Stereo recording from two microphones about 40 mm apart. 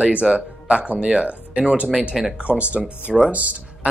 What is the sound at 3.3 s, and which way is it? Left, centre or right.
Speech, right.